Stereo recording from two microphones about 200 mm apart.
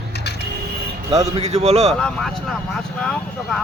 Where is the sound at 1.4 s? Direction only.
35° right (ahead or behind).